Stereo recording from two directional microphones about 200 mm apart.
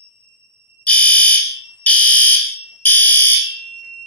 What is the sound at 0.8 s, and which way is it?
Fire alarm, 5° left (ahead or behind).